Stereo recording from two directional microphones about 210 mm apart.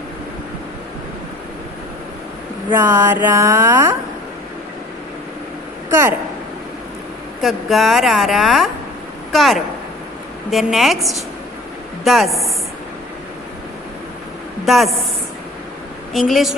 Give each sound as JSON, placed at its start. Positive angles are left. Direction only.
{"t": 2.6, "sound": "speech", "side_deg": -10}
{"t": 5.9, "sound": "speech", "side_deg": -10}
{"t": 7.4, "sound": "a woman's voice", "side_deg": 0}
{"t": 14.6, "sound": "a woman's voice", "side_deg": 0}
{"t": 16.1, "sound": "a woman's voice", "side_deg": 0}